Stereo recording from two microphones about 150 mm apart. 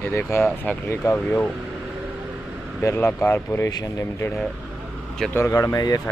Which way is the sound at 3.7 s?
25° left (ahead or behind).